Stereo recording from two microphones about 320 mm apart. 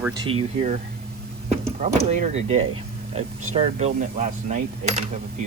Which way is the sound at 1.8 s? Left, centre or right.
Right.